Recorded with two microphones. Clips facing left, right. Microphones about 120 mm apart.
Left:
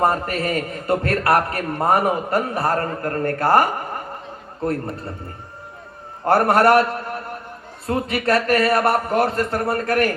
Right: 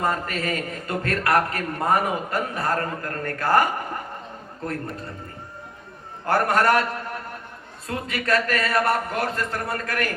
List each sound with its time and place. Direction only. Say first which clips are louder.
0.0 s a man's voice: left 5 dB; 30° left (ahead or behind)
6.2 s a man's voice: left 5 dB; 30° left (ahead or behind)